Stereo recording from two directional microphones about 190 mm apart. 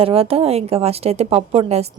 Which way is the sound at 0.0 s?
30° right (ahead or behind).